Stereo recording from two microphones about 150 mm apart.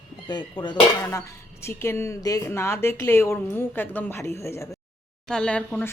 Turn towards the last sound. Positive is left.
turn(degrees=10)  # may be behind; listen again after turning